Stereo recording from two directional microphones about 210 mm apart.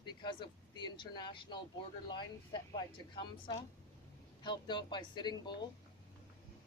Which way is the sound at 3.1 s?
20° left (ahead or behind).